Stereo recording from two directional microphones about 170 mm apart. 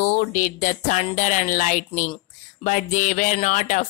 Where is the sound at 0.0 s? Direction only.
45° left (ahead or behind).